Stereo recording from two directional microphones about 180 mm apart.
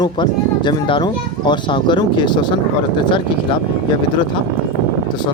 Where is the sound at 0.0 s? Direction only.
25° left (ahead or behind).